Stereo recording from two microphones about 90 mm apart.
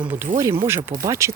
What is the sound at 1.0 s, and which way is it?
Speech, 35° right (ahead or behind).